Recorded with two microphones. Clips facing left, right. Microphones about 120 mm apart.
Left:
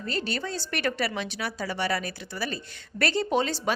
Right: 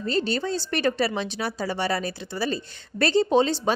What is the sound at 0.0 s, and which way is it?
A woman's voice, 30° right (ahead or behind).